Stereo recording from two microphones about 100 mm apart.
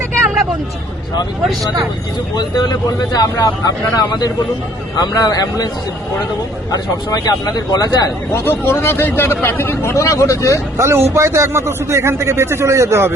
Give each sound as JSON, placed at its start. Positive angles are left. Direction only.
{"t": 2.3, "sound": "speech", "side_deg": 40}
{"t": 6.7, "sound": "speech", "side_deg": 40}
{"t": 8.3, "sound": "speech", "side_deg": 25}
{"t": 10.8, "sound": "speech", "side_deg": -25}